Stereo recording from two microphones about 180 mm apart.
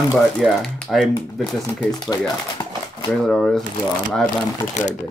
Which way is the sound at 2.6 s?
25° left (ahead or behind).